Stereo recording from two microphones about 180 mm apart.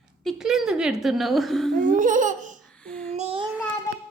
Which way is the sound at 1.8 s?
45° right (ahead or behind).